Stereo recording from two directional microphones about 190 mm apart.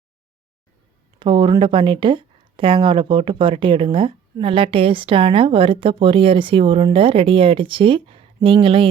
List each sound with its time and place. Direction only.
1.2 s speech: 25° right (ahead or behind)